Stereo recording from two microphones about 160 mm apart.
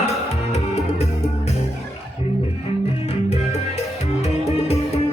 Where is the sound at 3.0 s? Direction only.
40° left (ahead or behind).